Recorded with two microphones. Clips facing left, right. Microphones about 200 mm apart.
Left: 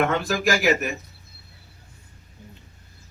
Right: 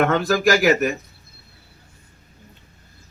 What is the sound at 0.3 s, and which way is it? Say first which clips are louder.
Speech: right 5 dB; 40° right (ahead or behind).